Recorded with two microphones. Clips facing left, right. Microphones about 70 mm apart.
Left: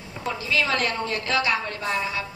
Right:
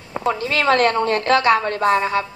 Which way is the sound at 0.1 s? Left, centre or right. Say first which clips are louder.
Right 6 dB; right.